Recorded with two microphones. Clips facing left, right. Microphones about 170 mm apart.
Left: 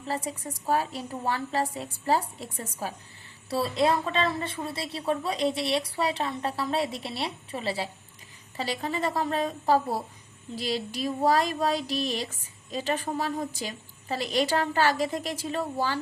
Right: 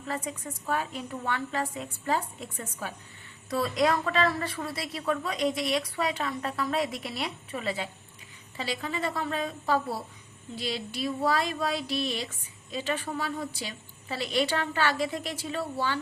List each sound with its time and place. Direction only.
0.0 s a woman's voice: 35° left (ahead or behind)